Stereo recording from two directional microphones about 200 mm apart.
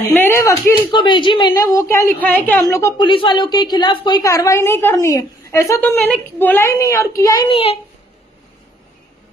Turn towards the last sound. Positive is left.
turn(degrees=30)  # may be behind; listen again after turning